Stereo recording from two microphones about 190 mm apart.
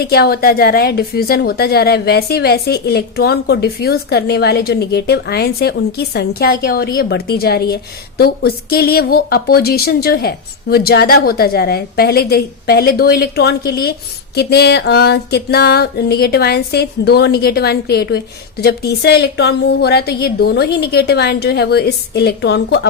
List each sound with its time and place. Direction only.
0.0 s music: 55° left (ahead or behind)